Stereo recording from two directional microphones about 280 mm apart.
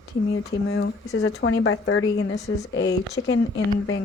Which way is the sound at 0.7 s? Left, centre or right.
Left.